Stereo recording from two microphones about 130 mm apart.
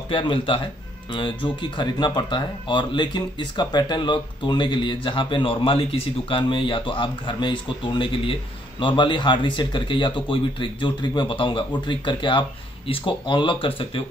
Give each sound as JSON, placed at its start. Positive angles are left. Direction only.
{"t": 0.1, "sound": "speech", "side_deg": 40}